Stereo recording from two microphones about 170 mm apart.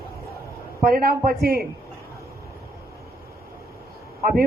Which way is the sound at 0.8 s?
60° right (ahead or behind).